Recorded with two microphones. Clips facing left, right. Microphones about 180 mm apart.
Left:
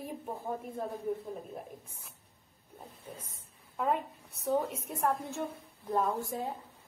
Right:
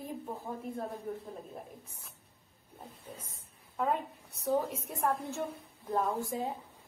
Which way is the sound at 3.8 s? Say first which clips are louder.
Left 1 dB; centre (ahead or behind).